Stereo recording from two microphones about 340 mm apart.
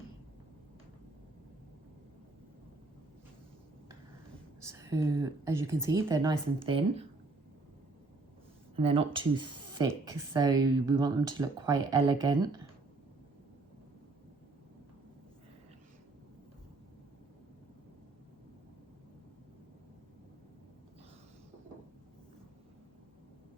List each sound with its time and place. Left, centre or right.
4.6 s speech: centre
8.7 s speech: centre